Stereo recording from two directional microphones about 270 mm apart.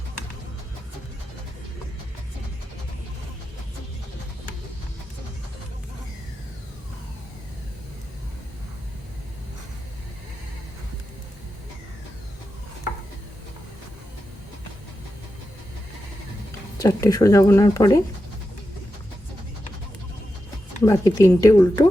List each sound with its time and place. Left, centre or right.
16.7 s speech: centre
20.8 s speech: centre